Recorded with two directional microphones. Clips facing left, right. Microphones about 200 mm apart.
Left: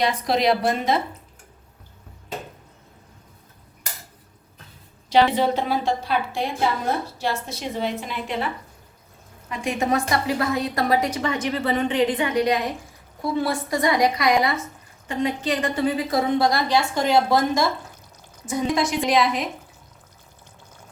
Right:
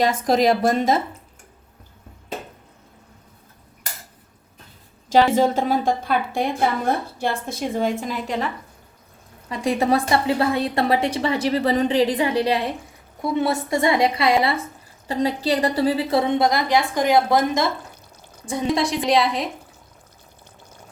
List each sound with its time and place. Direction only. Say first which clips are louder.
0.0 s a woman's voice: right 3 dB; 45° right (ahead or behind)
5.1 s a woman's voice: right 2 dB; 45° right (ahead or behind)
9.5 s a woman's voice: right 3 dB; 35° right (ahead or behind); by 17.7 s 20° right (ahead or behind)
18.4 s a woman's voice: right 1 dB; 30° right (ahead or behind)